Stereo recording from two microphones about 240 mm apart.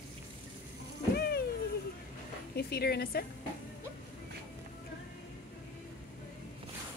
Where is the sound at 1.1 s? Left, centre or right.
Left.